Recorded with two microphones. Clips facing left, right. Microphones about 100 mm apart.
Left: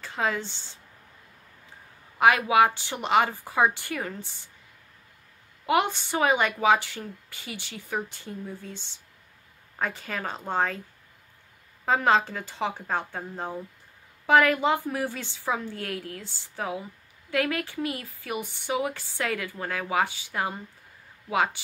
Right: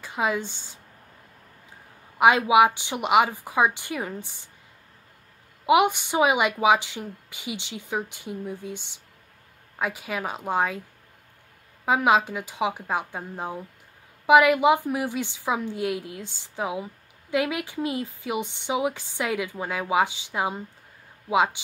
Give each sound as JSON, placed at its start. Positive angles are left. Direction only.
{"t": 0.0, "sound": "a woman's voice", "side_deg": -15}
{"t": 2.1, "sound": "speech", "side_deg": -15}
{"t": 5.7, "sound": "speech", "side_deg": -15}
{"t": 11.8, "sound": "speech", "side_deg": -10}